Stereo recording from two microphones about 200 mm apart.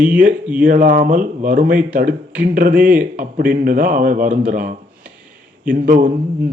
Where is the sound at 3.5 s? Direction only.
45° right (ahead or behind).